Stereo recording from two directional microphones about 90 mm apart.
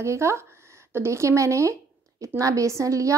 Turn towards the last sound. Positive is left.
turn(degrees=-35)  # may be behind; listen again after turning